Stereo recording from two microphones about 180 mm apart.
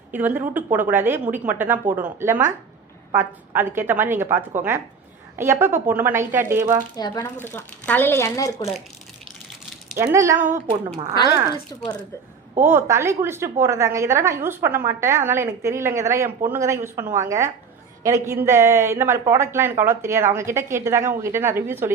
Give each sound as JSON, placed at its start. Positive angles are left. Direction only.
{"t": 0.1, "sound": "a woman's voice", "side_deg": -10}
{"t": 6.9, "sound": "speech", "side_deg": 20}
{"t": 7.4, "sound": "speech", "side_deg": 10}
{"t": 9.9, "sound": "a woman's voice", "side_deg": -15}
{"t": 10.7, "sound": "a woman's voice", "side_deg": -30}
{"t": 11.7, "sound": "speech", "side_deg": 20}
{"t": 12.6, "sound": "a woman's voice", "side_deg": -15}